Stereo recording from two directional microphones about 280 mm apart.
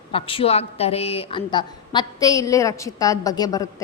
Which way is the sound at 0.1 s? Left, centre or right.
Centre.